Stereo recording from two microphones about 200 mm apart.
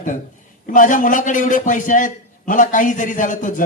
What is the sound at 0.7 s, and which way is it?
A man's voice, 40° left (ahead or behind).